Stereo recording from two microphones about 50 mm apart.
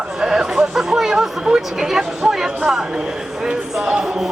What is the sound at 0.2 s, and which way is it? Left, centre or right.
Speech, centre.